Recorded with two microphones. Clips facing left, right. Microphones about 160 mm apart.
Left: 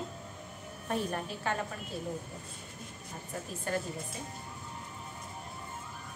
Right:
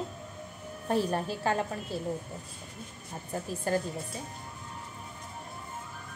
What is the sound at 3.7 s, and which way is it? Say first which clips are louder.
Speech: right 5 dB; 35° right (ahead or behind).